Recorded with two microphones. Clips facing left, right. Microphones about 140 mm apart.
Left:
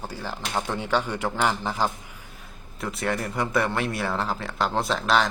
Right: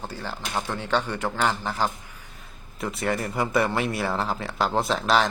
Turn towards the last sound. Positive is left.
turn(degrees=0)  # may be behind; listen again after turning